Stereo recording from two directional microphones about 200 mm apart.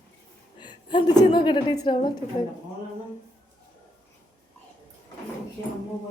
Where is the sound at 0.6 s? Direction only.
20° left (ahead or behind).